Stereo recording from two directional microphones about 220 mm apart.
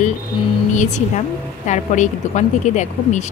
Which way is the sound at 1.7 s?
35° left (ahead or behind).